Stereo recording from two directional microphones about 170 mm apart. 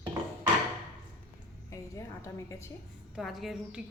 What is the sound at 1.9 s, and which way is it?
Speech, 20° left (ahead or behind).